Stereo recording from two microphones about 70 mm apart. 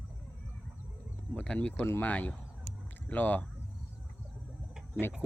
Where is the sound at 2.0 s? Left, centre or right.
Left.